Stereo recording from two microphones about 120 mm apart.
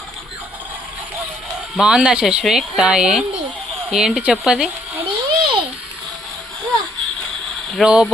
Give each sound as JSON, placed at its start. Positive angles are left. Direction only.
{"t": 1.7, "sound": "speech", "side_deg": -5}
{"t": 5.0, "sound": "a sound", "side_deg": -45}
{"t": 7.8, "sound": "speech", "side_deg": -5}